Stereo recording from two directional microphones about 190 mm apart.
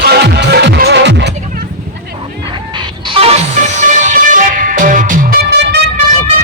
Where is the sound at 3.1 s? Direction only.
30° right (ahead or behind).